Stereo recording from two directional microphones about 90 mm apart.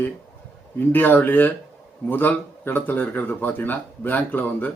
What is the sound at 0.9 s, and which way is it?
Speech, 20° left (ahead or behind).